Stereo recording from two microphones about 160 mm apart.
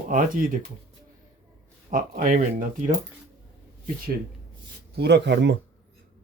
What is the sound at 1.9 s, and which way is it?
Speech, 60° right (ahead or behind).